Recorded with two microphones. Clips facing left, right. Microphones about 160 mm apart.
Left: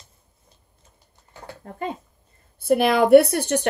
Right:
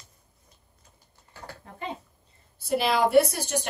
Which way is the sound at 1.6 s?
50° left (ahead or behind).